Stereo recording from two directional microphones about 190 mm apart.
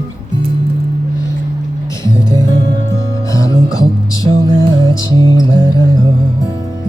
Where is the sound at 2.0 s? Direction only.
15° left (ahead or behind).